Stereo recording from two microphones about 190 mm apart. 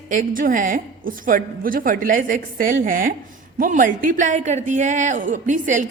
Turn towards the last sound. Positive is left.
turn(degrees=-40)  # may be behind; listen again after turning